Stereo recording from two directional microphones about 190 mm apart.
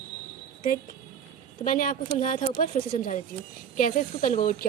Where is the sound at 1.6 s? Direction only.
45° left (ahead or behind).